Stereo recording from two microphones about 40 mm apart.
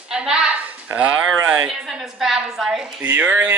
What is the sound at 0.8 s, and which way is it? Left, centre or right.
Speech, right.